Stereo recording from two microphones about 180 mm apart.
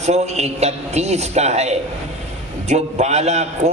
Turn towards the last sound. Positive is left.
turn(degrees=-40)  # may be behind; listen again after turning